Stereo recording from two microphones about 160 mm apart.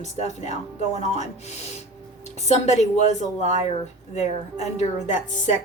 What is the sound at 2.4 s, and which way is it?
Speech, 45° left (ahead or behind).